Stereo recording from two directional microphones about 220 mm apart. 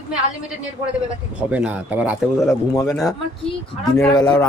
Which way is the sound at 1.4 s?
5° right (ahead or behind).